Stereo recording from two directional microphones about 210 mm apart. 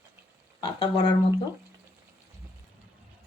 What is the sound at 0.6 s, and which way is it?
Speech, 25° left (ahead or behind).